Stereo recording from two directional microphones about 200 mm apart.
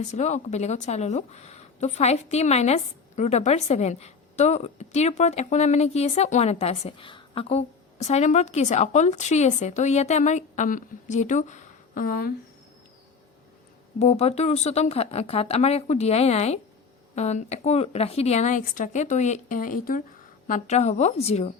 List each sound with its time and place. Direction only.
0.0 s speech: 35° left (ahead or behind)
14.0 s speech: 30° left (ahead or behind)